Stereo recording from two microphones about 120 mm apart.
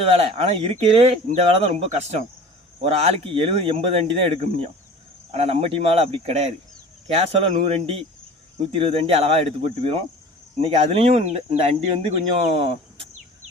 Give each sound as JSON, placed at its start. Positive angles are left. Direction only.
{"t": 0.2, "sound": "speech", "side_deg": -55}